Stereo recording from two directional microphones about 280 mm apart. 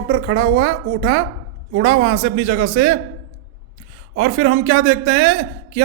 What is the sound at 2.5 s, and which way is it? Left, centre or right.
Speech, right.